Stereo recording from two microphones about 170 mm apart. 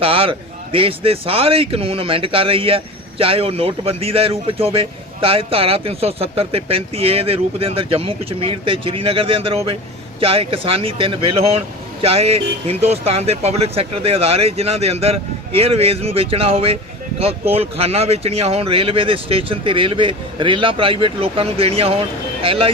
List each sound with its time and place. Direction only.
0.0 s speech: 35° right (ahead or behind)